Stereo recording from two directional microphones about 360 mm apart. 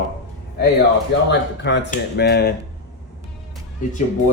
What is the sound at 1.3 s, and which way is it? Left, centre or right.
Speech, left.